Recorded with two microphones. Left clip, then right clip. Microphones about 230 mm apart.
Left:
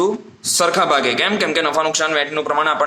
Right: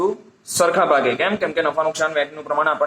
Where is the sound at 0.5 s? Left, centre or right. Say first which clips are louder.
Even; left.